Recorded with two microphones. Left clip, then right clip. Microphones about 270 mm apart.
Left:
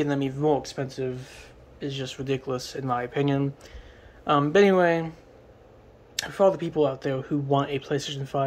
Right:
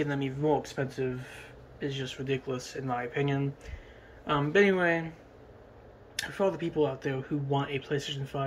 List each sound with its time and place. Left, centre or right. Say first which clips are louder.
0.0 s speech: left 5 dB; centre
6.2 s speech: left 8 dB; centre